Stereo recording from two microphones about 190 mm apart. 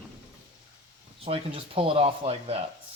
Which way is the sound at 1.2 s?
30° right (ahead or behind).